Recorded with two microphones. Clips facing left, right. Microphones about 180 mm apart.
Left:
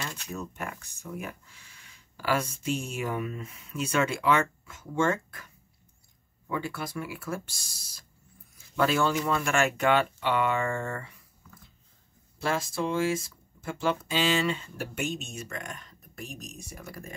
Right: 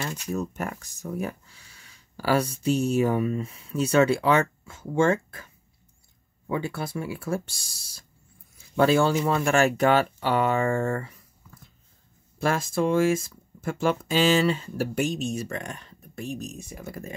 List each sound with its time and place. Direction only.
0.3 s speech: 40° right (ahead or behind)
6.5 s speech: 30° right (ahead or behind)
12.4 s speech: 50° right (ahead or behind); by 17.0 s 20° right (ahead or behind)